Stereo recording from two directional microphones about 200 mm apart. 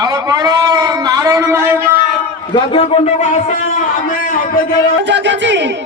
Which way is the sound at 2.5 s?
25° left (ahead or behind).